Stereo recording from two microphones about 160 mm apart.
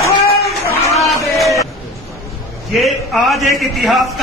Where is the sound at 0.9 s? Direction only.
Centre (ahead or behind).